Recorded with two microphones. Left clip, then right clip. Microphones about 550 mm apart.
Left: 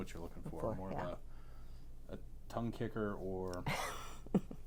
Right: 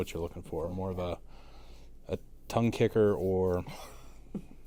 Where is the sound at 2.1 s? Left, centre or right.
Right.